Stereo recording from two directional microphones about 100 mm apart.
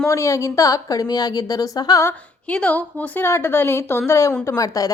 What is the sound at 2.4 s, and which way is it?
A woman's voice, 10° left (ahead or behind).